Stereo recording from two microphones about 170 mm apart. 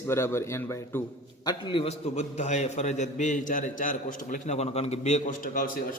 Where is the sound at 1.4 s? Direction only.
30° left (ahead or behind).